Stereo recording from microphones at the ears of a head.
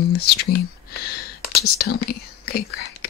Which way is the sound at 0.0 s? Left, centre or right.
Left.